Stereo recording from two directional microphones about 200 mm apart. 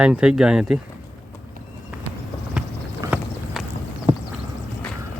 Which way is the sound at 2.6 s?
5° right (ahead or behind).